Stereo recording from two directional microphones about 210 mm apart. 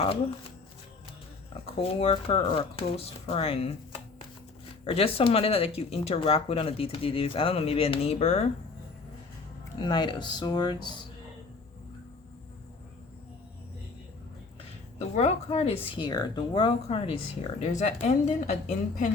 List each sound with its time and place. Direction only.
1.6 s speech: 30° left (ahead or behind)
4.9 s speech: 25° left (ahead or behind)
9.7 s speech: 20° left (ahead or behind)
15.1 s a woman's voice: 30° left (ahead or behind)